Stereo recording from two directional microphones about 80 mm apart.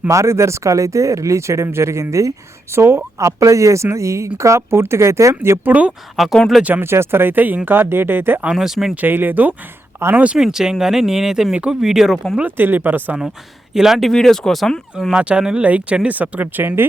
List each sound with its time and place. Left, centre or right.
0.1 s speech: right
5.6 s speech: centre
6.1 s speech: centre
6.6 s speech: right
8.4 s speech: centre
9.0 s speech: right
10.0 s speech: right
10.3 s speech: centre
12.4 s speech: right
13.7 s speech: centre
15.1 s speech: centre